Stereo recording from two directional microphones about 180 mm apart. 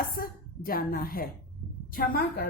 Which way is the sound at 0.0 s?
55° left (ahead or behind).